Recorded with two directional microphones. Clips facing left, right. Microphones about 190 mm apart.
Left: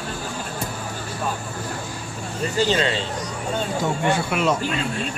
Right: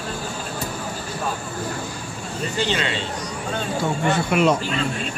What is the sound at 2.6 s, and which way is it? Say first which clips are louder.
Speech: left 4 dB; 35° left (ahead or behind).